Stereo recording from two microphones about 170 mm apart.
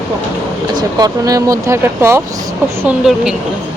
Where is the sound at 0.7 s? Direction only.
20° right (ahead or behind).